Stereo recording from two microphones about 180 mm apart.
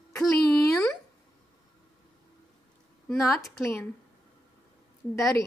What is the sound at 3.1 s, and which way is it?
Speech, 15° left (ahead or behind).